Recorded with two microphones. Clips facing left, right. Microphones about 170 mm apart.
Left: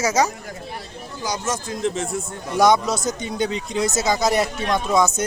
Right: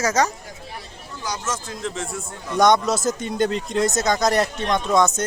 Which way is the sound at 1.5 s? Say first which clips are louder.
Left 7 dB; 20° left (ahead or behind).